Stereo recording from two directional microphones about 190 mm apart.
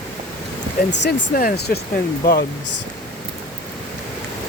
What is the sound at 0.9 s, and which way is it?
Speech, 65° left (ahead or behind).